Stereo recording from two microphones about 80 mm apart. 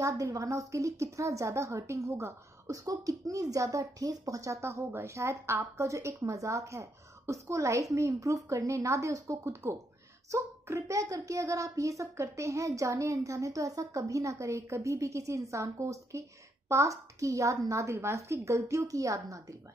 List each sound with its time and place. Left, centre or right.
0.0 s a woman's voice: right